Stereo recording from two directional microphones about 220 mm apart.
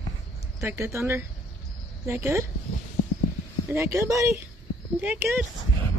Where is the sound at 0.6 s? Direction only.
10° right (ahead or behind).